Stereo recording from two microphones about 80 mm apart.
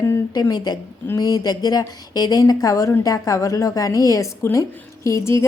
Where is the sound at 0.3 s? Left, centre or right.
Left.